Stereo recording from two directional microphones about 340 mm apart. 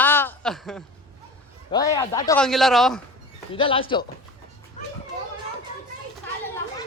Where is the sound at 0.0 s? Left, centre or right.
Centre.